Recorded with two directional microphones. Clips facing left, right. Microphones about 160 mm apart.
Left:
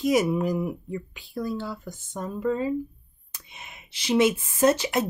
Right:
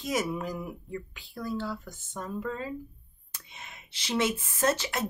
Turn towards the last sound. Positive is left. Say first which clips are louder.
# left 7 dB
turn(degrees=15)  # may be behind; listen again after turning